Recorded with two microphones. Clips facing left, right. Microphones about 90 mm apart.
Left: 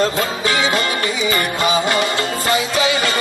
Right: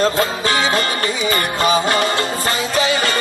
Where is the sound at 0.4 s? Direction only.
40° right (ahead or behind).